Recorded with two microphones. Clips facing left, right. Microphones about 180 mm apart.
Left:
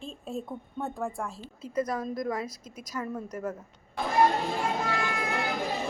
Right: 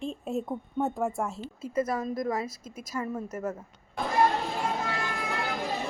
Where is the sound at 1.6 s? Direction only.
5° right (ahead or behind).